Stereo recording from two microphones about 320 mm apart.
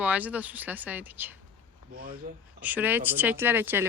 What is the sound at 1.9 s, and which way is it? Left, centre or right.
Speech, right.